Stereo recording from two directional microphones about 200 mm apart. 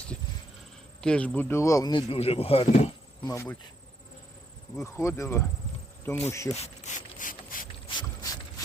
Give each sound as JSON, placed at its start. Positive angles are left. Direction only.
{"t": 1.0, "sound": "speech", "side_deg": 5}
{"t": 3.2, "sound": "insect", "side_deg": 10}
{"t": 4.8, "sound": "insect", "side_deg": 15}
{"t": 6.5, "sound": "pulleys", "side_deg": 35}
{"t": 7.9, "sound": "a sound", "side_deg": 20}